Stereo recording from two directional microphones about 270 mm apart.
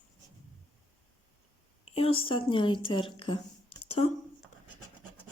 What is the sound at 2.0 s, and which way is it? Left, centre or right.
A woman's voice, centre.